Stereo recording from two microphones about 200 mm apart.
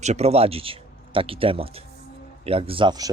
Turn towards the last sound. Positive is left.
turn(degrees=-20)  # may be behind; listen again after turning